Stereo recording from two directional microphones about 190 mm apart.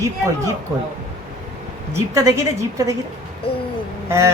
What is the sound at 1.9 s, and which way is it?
Speech, 15° right (ahead or behind).